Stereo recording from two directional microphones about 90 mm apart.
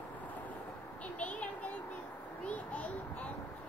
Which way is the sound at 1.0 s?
15° left (ahead or behind).